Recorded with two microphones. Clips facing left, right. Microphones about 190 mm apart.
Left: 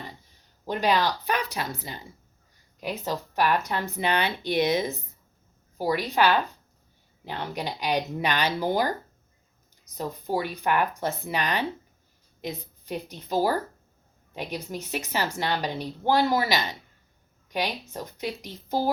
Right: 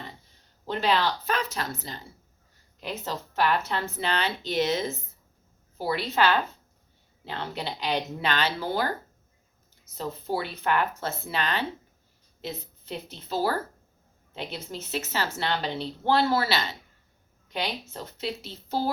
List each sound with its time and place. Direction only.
0.6 s a woman's voice: 15° left (ahead or behind)